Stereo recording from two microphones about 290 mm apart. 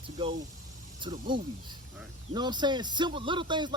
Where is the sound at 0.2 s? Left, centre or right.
Centre.